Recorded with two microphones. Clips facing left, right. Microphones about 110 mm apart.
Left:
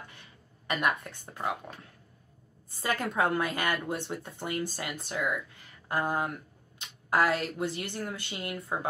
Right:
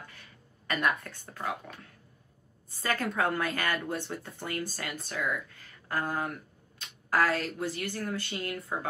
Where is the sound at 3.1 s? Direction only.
20° left (ahead or behind).